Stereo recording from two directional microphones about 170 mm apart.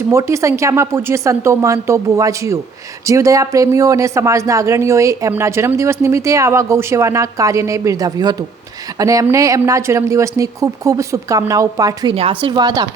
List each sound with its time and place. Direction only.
0.1 s a woman's voice: 15° right (ahead or behind)
12.1 s a woman's voice: 35° right (ahead or behind)